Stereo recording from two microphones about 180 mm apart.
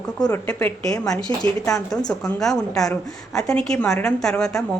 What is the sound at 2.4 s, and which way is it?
A woman's voice, centre (ahead or behind).